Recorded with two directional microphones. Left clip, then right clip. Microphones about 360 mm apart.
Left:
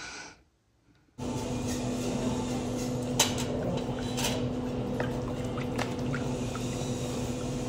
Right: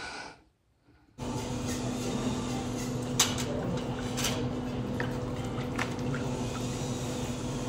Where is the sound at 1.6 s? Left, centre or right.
Centre.